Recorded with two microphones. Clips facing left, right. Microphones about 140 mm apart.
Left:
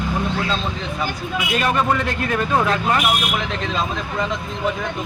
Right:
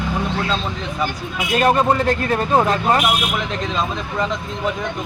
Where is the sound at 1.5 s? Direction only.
35° right (ahead or behind).